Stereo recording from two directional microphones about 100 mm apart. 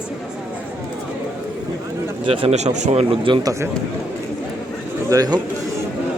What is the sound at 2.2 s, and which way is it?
A man's voice, 70° right (ahead or behind).